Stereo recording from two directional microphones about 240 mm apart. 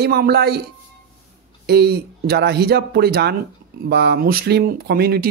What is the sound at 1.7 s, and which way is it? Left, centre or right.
Speech, right.